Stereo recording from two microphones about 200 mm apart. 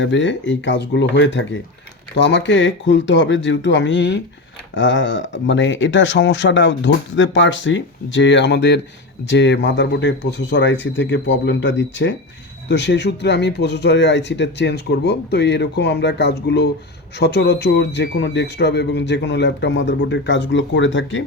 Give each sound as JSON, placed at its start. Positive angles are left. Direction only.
{"t": 0.0, "sound": "speech", "side_deg": 65}